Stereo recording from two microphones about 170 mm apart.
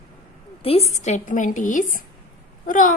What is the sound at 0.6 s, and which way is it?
A woman's voice, 35° left (ahead or behind).